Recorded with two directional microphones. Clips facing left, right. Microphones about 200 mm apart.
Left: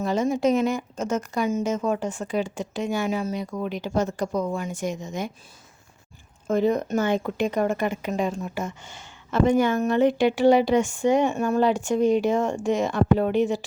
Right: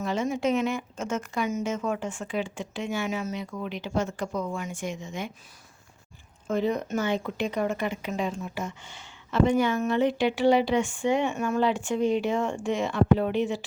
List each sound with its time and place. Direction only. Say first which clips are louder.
0.0 s a woman's voice: left 5 dB; 40° left (ahead or behind)
6.5 s speech: left 5 dB; 45° left (ahead or behind)